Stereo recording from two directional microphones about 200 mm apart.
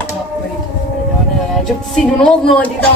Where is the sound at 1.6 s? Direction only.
Centre (ahead or behind).